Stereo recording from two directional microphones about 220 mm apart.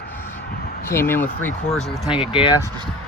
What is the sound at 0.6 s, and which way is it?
Speech, 45° left (ahead or behind).